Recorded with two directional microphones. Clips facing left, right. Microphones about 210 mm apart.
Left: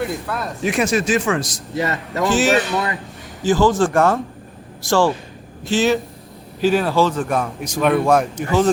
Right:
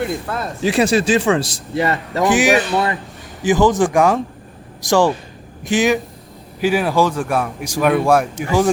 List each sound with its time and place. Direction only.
0.3 s a man's voice: 30° right (ahead or behind)
2.2 s speech: 15° right (ahead or behind)